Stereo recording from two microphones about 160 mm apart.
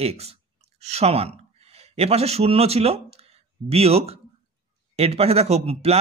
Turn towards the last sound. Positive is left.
turn(degrees=-40)  # may be behind; listen again after turning